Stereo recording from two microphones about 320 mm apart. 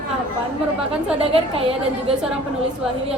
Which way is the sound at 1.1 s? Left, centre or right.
Centre.